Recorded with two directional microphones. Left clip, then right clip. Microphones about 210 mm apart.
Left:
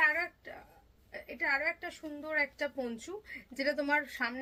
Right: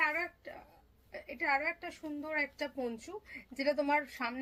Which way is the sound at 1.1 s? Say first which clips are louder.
Even; 10° left (ahead or behind).